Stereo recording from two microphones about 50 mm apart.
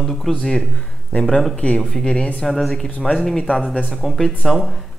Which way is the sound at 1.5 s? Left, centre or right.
Left.